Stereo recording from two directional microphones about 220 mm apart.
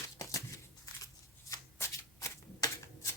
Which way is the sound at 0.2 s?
15° left (ahead or behind).